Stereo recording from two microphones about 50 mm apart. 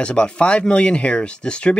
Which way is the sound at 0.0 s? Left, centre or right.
Left.